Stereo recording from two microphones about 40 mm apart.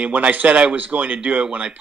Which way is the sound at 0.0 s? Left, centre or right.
Right.